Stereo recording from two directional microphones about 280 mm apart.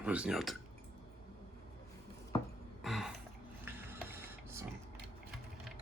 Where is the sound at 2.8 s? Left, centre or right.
Centre.